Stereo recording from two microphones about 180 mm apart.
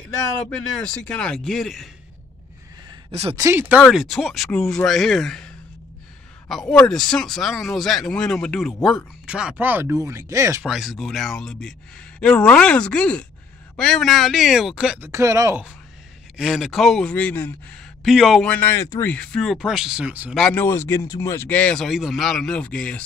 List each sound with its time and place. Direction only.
0.5 s speech: 5° left (ahead or behind)
3.1 s speech: 35° right (ahead or behind)
3.3 s speech: 15° right (ahead or behind)
3.8 s speech: centre (ahead or behind)
6.5 s speech: 5° left (ahead or behind); by 10.6 s 15° right (ahead or behind)
10.6 s speech: 5° right (ahead or behind)
15.0 s speech: 15° right (ahead or behind)
16.3 s speech: centre (ahead or behind)
18.0 s speech: centre (ahead or behind)
20.3 s speech: 5° left (ahead or behind)